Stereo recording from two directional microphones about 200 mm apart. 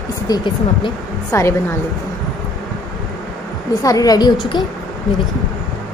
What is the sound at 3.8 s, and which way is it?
Speech, 20° left (ahead or behind).